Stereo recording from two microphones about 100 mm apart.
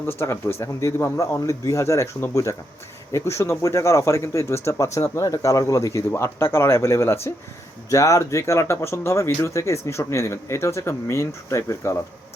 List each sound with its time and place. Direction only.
0.1 s speech: 25° left (ahead or behind)